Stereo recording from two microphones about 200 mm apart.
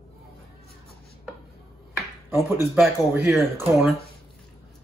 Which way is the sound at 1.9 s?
10° right (ahead or behind).